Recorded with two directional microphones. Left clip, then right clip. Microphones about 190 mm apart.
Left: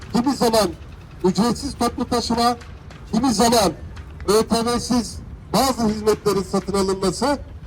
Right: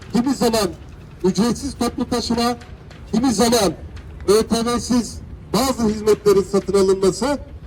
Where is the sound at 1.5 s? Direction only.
30° left (ahead or behind).